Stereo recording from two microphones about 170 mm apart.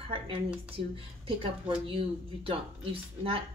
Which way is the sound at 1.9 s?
35° right (ahead or behind).